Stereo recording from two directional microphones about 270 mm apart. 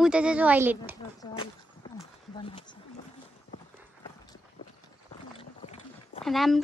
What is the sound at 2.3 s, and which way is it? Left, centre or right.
Speech, centre.